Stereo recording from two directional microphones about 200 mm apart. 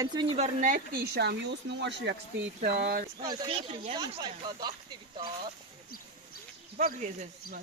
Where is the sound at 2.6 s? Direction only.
50° right (ahead or behind).